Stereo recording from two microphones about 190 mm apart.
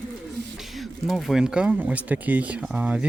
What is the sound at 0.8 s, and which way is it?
Speech, centre (ahead or behind).